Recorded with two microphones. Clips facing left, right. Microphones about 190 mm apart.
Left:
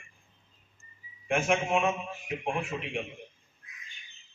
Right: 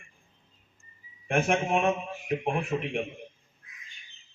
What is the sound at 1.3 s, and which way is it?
Speech, 55° right (ahead or behind).